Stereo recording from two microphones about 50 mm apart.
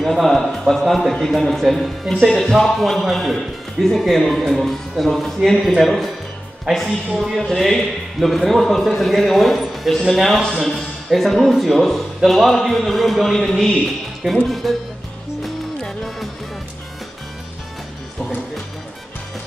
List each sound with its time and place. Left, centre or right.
0.0 s a man's voice: centre
6.7 s speech: centre
7.2 s a man's voice: centre
15.4 s music: centre